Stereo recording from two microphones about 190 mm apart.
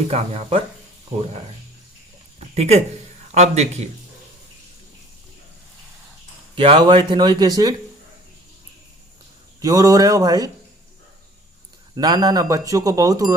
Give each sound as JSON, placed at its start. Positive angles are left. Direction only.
{"t": 0.1, "sound": "a man's voice", "side_deg": -30}
{"t": 2.6, "sound": "a man's voice", "side_deg": -35}
{"t": 6.6, "sound": "speech", "side_deg": -25}
{"t": 9.6, "sound": "speech", "side_deg": -20}
{"t": 11.9, "sound": "speech", "side_deg": -20}